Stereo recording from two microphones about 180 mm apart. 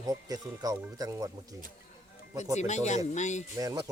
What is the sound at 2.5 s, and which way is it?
Speech, 40° left (ahead or behind).